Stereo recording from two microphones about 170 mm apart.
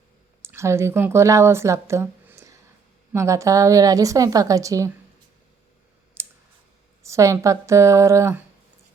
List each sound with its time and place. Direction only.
0.4 s a woman's voice: 15° right (ahead or behind)
6.2 s clicking: 15° right (ahead or behind)
7.0 s a woman's voice: 15° right (ahead or behind)